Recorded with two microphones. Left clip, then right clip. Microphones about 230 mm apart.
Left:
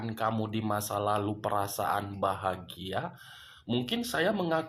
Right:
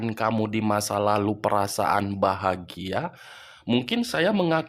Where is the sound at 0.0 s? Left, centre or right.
Right.